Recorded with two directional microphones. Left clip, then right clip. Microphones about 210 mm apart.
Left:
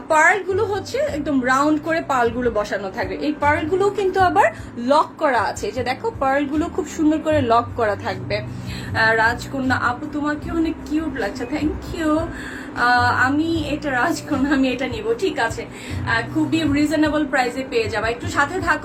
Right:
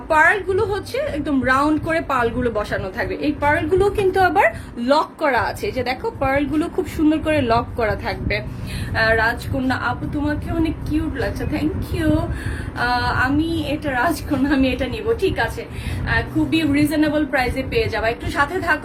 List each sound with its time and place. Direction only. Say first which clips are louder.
0.1 s a woman's voice: even; 15° right (ahead or behind)